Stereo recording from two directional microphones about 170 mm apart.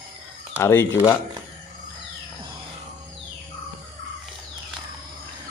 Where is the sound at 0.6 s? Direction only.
15° left (ahead or behind).